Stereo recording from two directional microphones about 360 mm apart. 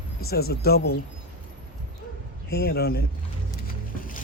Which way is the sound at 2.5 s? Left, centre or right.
Left.